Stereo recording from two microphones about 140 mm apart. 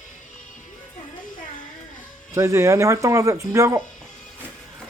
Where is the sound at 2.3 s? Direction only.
20° right (ahead or behind).